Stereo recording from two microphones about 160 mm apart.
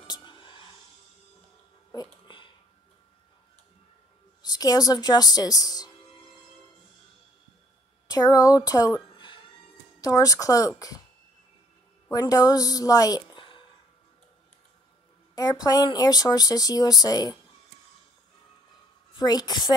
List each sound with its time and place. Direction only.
0.0 s a sound: 30° left (ahead or behind)
1.9 s a sound: 25° left (ahead or behind)
4.4 s a woman's voice: 25° left (ahead or behind)
8.1 s a woman's voice: 25° left (ahead or behind)
12.1 s a woman's voice: 25° left (ahead or behind)
15.3 s speech: 25° left (ahead or behind)
19.1 s speech: 25° left (ahead or behind)